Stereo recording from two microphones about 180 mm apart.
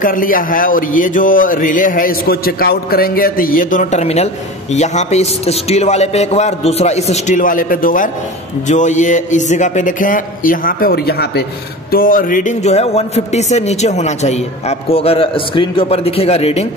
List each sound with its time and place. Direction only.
0.0 s speech: 50° left (ahead or behind); by 16.6 s 35° left (ahead or behind)